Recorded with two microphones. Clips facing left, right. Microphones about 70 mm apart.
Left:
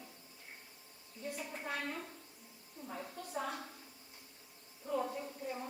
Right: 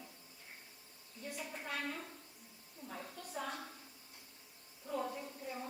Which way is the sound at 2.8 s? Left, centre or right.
Centre.